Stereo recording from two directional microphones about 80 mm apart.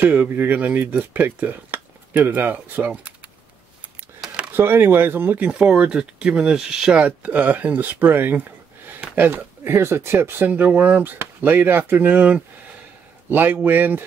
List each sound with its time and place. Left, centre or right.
0.0 s speech: right
4.5 s speech: right; by 7.0 s centre
7.0 s speech: centre